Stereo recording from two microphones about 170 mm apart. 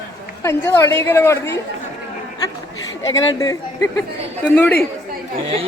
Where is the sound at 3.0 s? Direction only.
20° left (ahead or behind).